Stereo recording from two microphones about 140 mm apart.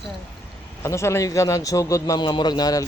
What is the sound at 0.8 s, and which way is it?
A man's voice, 20° left (ahead or behind).